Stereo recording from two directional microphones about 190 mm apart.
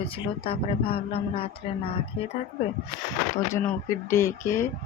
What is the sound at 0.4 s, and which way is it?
A man's voice, 30° left (ahead or behind).